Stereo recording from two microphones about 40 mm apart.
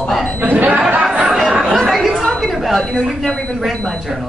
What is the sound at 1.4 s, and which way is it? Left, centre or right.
Chatter, centre.